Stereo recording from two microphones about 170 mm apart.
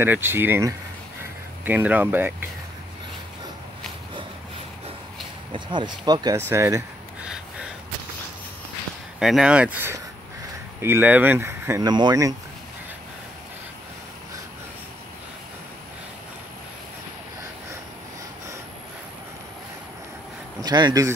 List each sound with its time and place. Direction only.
0.0 s speech: 15° right (ahead or behind)
5.5 s speech: 25° right (ahead or behind)
7.2 s gasp: 5° right (ahead or behind)
9.2 s speech: 5° right (ahead or behind); by 12.4 s 20° right (ahead or behind)
20.6 s speech: 25° right (ahead or behind)